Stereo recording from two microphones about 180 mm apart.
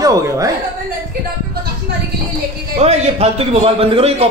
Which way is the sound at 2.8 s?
35° right (ahead or behind).